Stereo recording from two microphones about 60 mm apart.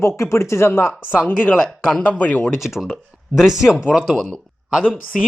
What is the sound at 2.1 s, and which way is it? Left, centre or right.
Speech, left.